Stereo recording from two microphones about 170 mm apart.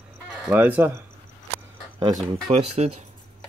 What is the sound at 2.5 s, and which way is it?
Speech, 40° right (ahead or behind).